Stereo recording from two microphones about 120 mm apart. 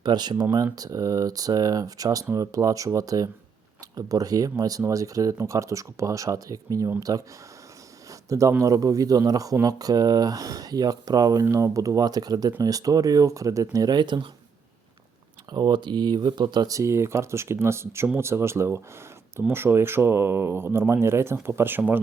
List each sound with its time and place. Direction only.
0.0 s speech: 35° right (ahead or behind)
8.3 s speech: 25° right (ahead or behind)
15.5 s speech: 40° right (ahead or behind); by 22.0 s 15° right (ahead or behind)